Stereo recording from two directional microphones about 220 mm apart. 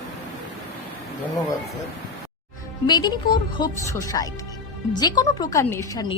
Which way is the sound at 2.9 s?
20° left (ahead or behind).